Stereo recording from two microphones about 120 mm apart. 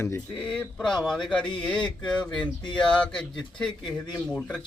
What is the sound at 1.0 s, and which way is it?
A man's voice, 5° left (ahead or behind).